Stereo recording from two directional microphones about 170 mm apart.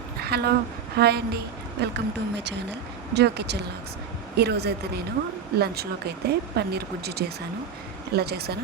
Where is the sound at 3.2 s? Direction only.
80° right.